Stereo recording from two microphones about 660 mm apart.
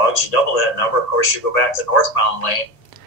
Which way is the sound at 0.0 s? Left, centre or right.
Left.